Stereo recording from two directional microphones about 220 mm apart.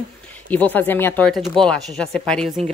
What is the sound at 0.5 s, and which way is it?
Speech, 5° left (ahead or behind).